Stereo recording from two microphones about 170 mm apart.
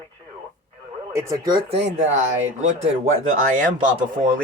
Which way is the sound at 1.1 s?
20° right (ahead or behind).